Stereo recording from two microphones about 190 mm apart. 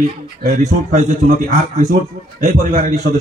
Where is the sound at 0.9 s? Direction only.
40° right (ahead or behind).